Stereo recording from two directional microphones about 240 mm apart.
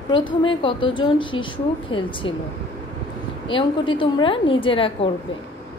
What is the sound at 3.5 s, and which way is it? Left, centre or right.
A woman's voice, left.